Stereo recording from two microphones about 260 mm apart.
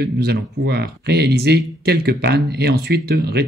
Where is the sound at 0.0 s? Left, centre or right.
Right.